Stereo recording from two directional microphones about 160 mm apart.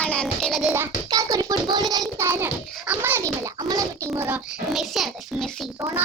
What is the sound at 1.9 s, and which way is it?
Child singing, 20° right (ahead or behind).